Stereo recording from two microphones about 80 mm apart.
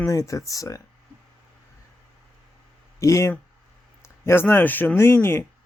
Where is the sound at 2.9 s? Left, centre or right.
Left.